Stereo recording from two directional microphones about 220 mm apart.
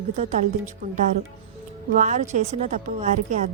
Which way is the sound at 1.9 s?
35° right (ahead or behind).